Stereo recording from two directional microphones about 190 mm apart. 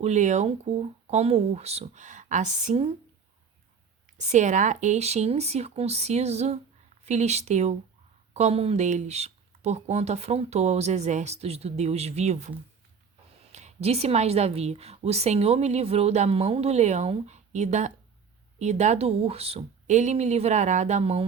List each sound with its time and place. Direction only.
0.0 s a woman's voice: 40° right (ahead or behind)
4.3 s a woman's voice: 40° right (ahead or behind)
13.5 s a woman's voice: 35° right (ahead or behind)